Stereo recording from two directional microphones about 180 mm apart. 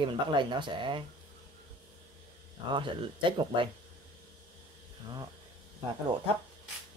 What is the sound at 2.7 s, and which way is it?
Speech, 30° right (ahead or behind).